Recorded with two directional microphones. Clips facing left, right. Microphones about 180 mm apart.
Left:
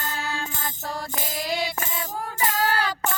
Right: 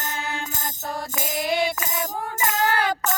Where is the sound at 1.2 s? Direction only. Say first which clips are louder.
Right 5 dB; 50° right (ahead or behind).